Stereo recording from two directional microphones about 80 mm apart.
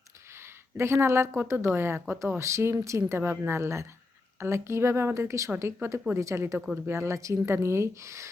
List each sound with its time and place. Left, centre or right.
0.8 s speech: right